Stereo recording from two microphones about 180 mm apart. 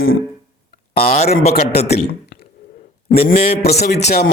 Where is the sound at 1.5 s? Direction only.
60° left (ahead or behind).